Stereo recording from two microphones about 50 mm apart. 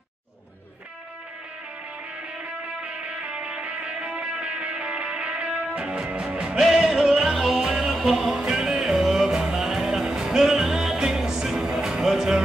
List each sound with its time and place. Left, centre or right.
2.4 s music: right; by 12.4 s centre